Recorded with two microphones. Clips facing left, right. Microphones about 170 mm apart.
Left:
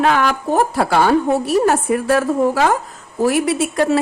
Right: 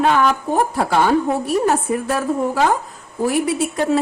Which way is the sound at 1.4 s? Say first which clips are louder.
Left 2 dB; 75° left (ahead or behind).